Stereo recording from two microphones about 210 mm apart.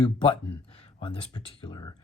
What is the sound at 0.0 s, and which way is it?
Speech, 25° left (ahead or behind).